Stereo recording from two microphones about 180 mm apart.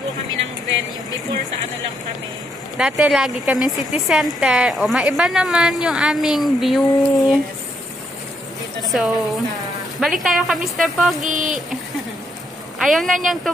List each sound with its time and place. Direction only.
2.8 s speech: 5° right (ahead or behind)
8.8 s speech: centre (ahead or behind)
11.2 s a sound: 45° right (ahead or behind)
12.7 s speech: centre (ahead or behind)